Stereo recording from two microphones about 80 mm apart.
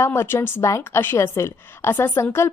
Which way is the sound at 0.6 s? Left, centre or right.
Left.